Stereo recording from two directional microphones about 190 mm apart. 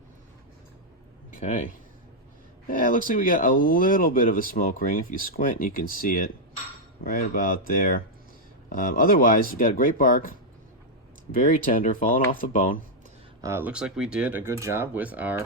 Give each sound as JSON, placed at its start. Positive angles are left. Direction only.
{"t": 1.4, "sound": "speech", "side_deg": 45}
{"t": 2.6, "sound": "speech", "side_deg": 45}
{"t": 11.3, "sound": "speech", "side_deg": 45}
{"t": 13.4, "sound": "speech", "side_deg": -10}